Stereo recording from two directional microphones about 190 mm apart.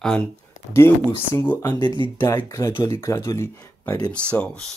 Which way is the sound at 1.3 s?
10° left (ahead or behind).